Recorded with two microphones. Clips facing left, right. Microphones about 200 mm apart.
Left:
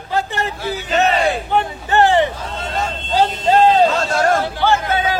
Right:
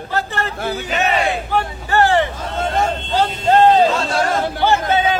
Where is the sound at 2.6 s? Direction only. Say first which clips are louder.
Right 6 dB; 50° right (ahead or behind).